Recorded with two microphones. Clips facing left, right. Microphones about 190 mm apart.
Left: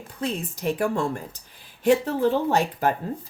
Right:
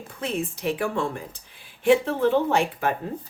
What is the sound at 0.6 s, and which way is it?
Speech, 45° left (ahead or behind).